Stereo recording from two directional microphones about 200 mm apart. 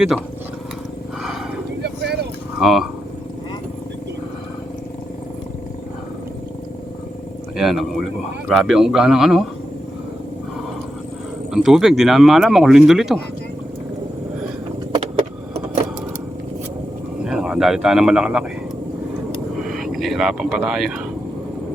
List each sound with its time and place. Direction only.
1.8 s vehicle: 55° right (ahead or behind)
2.6 s speech: centre (ahead or behind)
7.5 s speech: centre (ahead or behind)
11.5 s speech: 5° right (ahead or behind)
14.9 s vehicle: 25° right (ahead or behind)
17.2 s speech: 5° right (ahead or behind)
19.6 s speech: centre (ahead or behind)